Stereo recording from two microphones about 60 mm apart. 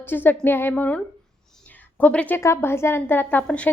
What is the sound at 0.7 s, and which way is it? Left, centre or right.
Speech, left.